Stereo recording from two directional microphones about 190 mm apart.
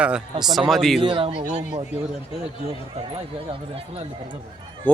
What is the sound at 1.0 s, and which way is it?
Speech, 30° right (ahead or behind).